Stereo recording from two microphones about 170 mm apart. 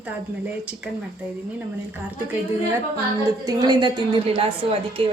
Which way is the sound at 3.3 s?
20° right (ahead or behind).